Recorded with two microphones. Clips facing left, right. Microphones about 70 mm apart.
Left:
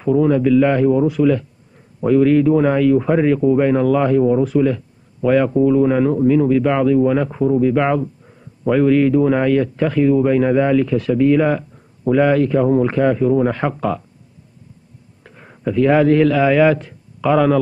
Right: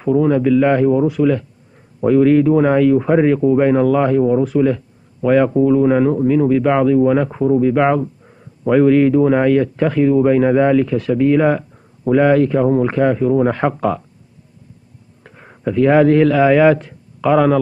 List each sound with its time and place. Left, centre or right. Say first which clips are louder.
0.0 s speech: even; right
15.2 s a man's voice: right 1 dB; right